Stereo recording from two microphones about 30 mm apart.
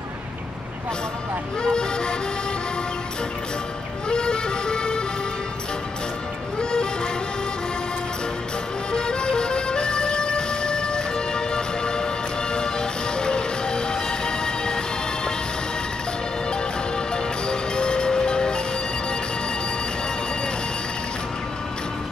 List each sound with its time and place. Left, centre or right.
1.6 s speech: left
4.1 s music: left
6.6 s music: left
8.9 s music: left
17.1 s music: left